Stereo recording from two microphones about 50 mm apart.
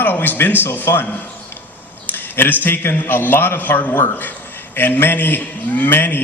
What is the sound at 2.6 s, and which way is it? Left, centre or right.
A man's voice, left.